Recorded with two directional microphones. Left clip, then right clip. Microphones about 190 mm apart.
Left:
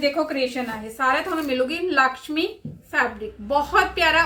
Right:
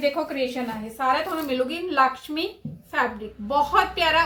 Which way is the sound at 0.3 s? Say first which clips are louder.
Left 2 dB; 15° left (ahead or behind).